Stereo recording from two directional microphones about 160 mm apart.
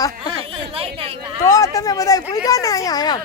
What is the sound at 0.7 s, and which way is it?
Chatter, 35° right (ahead or behind).